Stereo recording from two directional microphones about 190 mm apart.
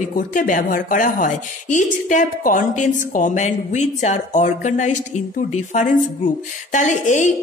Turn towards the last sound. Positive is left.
turn(degrees=40)  # may be behind; listen again after turning